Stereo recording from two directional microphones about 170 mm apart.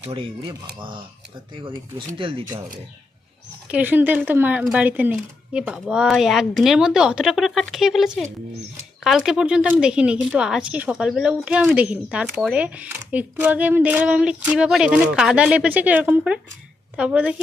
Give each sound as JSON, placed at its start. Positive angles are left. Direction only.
{"t": 0.0, "sound": "speech", "side_deg": -30}
{"t": 3.7, "sound": "speech", "side_deg": -10}